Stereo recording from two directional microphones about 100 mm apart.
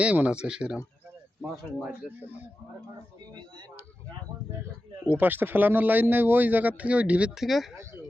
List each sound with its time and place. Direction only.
0.0 s speech: 10° right (ahead or behind)
5.1 s speech: 20° right (ahead or behind); by 7.7 s centre (ahead or behind)